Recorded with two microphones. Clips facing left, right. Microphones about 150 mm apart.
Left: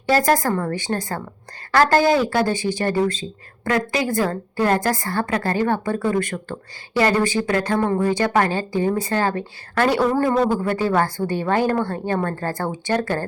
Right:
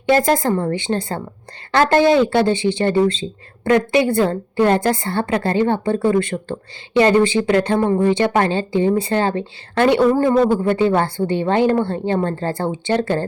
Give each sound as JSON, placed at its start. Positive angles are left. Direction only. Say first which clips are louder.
{"t": 0.0, "sound": "speech", "louder": "right 2 dB", "side_deg": -20}